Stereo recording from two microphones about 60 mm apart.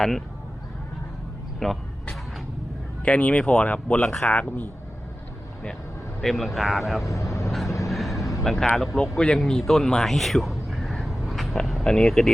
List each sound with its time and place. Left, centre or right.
1.5 s speech: centre
3.0 s speech: left
4.0 s speech: centre
4.3 s speech: left
6.2 s speech: centre
7.1 s vehicle: left
7.7 s a sound: left
7.9 s vehicle: centre
8.4 s speech: centre
9.1 s speech: centre
9.4 s a sound: centre
11.9 s speech: centre